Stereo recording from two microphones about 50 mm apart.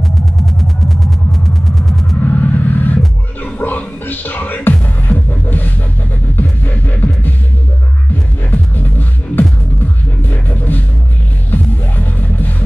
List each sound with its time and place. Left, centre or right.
0.2 s music: centre
2.2 s rumble: left
3.5 s music: left
8.5 s music: left